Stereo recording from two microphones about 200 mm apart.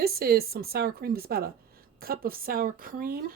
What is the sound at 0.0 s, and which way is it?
Speech, 50° right (ahead or behind).